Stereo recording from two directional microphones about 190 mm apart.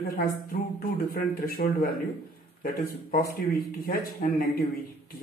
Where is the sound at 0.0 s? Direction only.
50° left (ahead or behind).